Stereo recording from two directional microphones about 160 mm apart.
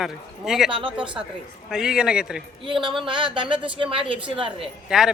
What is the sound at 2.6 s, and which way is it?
A woman's voice, 30° right (ahead or behind).